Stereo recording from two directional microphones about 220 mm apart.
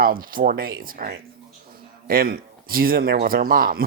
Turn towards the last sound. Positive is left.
turn(degrees=-40)  # may be behind; listen again after turning